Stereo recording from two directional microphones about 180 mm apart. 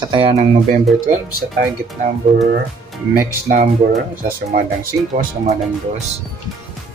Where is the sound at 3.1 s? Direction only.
50° right (ahead or behind).